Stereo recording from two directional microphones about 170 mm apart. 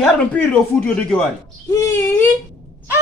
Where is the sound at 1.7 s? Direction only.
15° left (ahead or behind).